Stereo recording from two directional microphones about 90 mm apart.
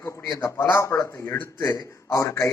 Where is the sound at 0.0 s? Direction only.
25° left (ahead or behind).